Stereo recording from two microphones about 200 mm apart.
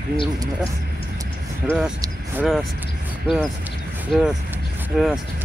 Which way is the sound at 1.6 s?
Centre (ahead or behind).